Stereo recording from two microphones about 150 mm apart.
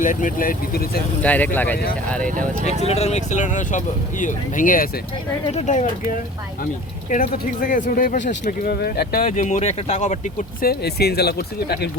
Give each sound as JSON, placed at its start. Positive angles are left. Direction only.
{"t": 0.0, "sound": "speech", "side_deg": 60}
{"t": 1.2, "sound": "speech", "side_deg": 10}
{"t": 2.2, "sound": "speech", "side_deg": -60}
{"t": 2.6, "sound": "speech", "side_deg": 45}
{"t": 5.5, "sound": "speech", "side_deg": 50}
{"t": 7.1, "sound": "speech", "side_deg": 65}